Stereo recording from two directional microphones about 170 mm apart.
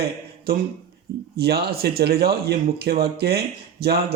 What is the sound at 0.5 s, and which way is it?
Speech, 65° right (ahead or behind).